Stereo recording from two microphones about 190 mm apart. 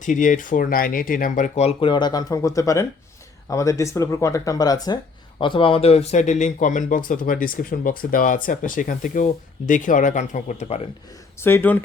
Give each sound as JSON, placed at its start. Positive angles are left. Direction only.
{"t": 0.0, "sound": "speech", "side_deg": 45}
{"t": 11.3, "sound": "speech", "side_deg": 10}